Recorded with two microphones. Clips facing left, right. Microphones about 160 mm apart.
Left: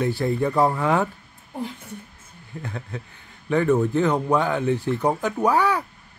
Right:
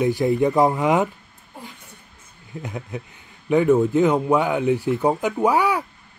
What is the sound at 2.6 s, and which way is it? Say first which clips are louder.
A man's voice: right 3 dB; 15° right (ahead or behind).